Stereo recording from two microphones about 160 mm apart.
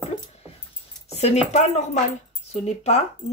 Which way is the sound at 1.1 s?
40° left (ahead or behind).